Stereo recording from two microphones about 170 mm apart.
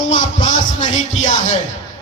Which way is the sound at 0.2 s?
50° left (ahead or behind).